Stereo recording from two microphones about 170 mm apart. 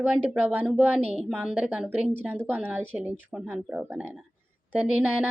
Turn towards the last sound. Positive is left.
turn(degrees=-10)  # may be behind; listen again after turning